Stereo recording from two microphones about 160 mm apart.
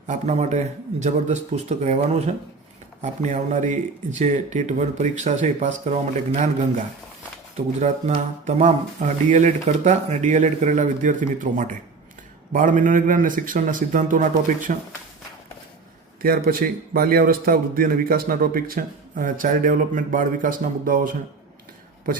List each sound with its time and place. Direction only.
0.1 s a man's voice: 45° right (ahead or behind)
16.2 s a man's voice: 65° right (ahead or behind)